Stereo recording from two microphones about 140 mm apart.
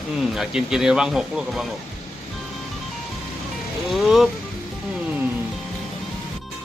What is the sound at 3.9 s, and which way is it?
Speech, centre (ahead or behind).